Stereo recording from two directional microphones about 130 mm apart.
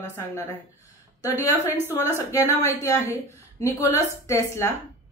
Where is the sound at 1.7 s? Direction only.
15° right (ahead or behind).